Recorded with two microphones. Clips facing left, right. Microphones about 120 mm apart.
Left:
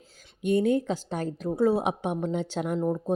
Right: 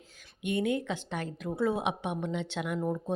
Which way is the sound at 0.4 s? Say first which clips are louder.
Left 6 dB; 40° left (ahead or behind).